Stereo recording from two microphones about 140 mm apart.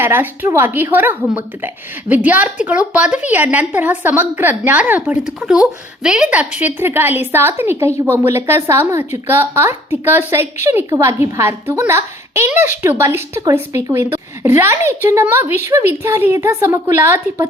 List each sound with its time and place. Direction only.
0.0 s a woman's voice: 15° right (ahead or behind)